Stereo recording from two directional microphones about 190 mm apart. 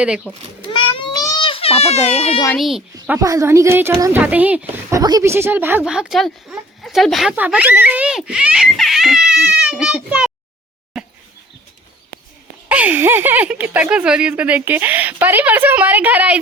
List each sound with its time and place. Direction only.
0.0 s a child's voice: 5° right (ahead or behind)
0.7 s baby cry: 25° left (ahead or behind)
2.6 s a child's voice: centre (ahead or behind)
3.1 s speech: 15° right (ahead or behind)
10.9 s a sound: centre (ahead or behind)
12.6 s speech: 10° right (ahead or behind)